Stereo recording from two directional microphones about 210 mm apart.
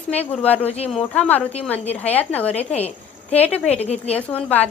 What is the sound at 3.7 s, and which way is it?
Speech, 30° left (ahead or behind).